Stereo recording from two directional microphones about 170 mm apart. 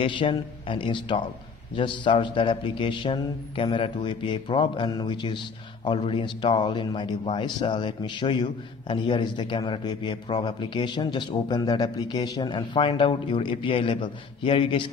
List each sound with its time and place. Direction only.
0.0 s speech: 30° left (ahead or behind)